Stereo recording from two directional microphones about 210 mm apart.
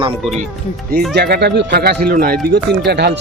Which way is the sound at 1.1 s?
50° right (ahead or behind).